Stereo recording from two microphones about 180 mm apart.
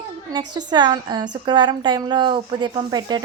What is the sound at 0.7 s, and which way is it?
A woman's voice, 25° right (ahead or behind).